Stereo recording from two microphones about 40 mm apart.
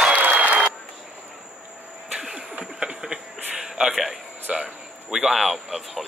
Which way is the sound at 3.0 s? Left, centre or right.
Centre.